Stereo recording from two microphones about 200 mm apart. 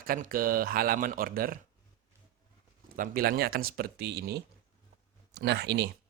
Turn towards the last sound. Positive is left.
turn(degrees=-55)  # may be behind; listen again after turning